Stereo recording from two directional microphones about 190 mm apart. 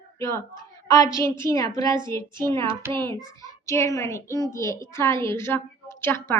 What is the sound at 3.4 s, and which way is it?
A child's voice, 15° left (ahead or behind).